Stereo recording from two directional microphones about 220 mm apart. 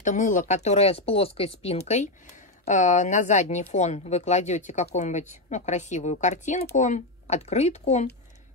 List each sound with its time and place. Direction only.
0.0 s speech: 35° left (ahead or behind)